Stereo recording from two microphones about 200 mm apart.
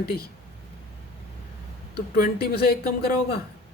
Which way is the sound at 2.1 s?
50° left (ahead or behind).